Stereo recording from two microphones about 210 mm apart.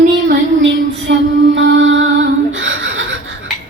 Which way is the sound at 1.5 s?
65° right (ahead or behind).